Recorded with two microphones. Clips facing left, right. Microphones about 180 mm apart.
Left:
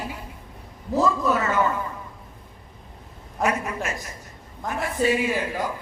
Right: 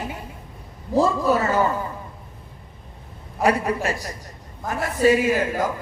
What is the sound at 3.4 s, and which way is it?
A man's voice, 35° right (ahead or behind).